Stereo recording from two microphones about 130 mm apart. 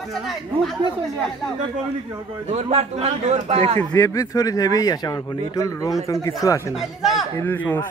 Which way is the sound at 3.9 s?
25° left (ahead or behind).